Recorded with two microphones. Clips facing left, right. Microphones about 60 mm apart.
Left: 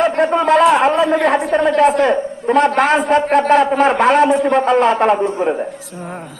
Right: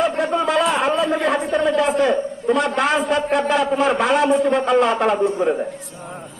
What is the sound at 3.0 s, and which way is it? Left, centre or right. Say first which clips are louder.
A man's voice: left 5 dB; left.